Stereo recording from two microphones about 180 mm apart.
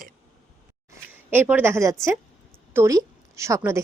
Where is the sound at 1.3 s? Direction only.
10° right (ahead or behind).